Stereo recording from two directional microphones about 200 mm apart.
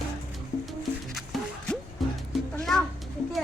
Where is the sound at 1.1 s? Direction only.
Centre (ahead or behind).